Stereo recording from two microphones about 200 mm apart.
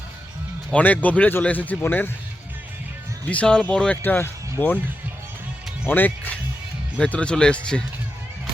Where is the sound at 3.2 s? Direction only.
5° left (ahead or behind).